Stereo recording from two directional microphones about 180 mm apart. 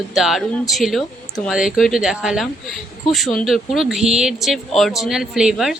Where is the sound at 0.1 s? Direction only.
Centre (ahead or behind).